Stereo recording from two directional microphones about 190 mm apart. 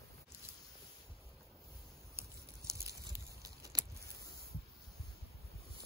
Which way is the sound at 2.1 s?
15° right (ahead or behind).